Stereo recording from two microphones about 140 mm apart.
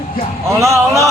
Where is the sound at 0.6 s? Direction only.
20° right (ahead or behind).